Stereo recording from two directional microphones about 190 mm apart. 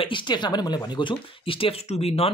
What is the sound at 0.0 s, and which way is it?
Speech, 25° left (ahead or behind).